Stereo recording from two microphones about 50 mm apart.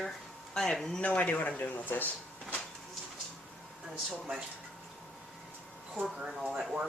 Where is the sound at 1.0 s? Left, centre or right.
Left.